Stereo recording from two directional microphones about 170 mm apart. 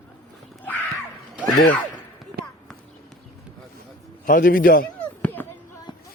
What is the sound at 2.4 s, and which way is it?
Clip-clop, 70° right (ahead or behind).